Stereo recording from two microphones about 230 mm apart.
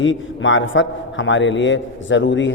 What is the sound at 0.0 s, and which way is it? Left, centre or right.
A man's voice, left.